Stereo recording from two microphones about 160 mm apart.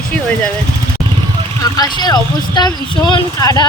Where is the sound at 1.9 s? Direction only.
25° left (ahead or behind).